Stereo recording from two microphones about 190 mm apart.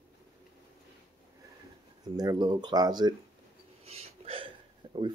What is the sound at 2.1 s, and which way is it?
Speech, 20° right (ahead or behind).